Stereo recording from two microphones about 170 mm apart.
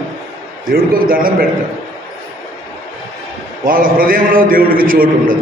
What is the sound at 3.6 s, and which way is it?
A man's voice, 55° right (ahead or behind).